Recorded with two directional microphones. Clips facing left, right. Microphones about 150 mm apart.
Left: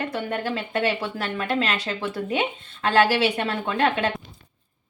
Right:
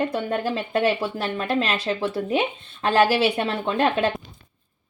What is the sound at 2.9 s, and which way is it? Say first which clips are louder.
Speech: right 1 dB; 10° right (ahead or behind).